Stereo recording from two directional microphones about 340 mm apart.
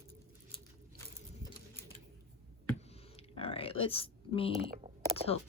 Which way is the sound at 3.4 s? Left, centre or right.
Centre.